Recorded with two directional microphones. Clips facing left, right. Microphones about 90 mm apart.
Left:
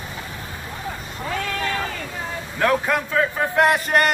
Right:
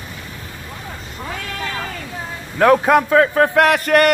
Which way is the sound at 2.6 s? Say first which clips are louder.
Right 8 dB; 65° right (ahead or behind).